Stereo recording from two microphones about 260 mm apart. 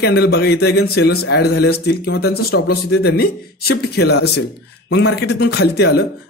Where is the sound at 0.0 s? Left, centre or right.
Left.